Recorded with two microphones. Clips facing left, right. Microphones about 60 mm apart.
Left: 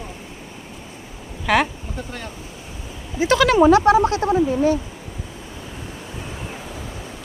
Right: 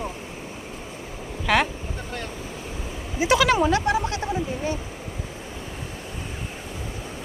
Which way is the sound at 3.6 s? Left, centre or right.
Left.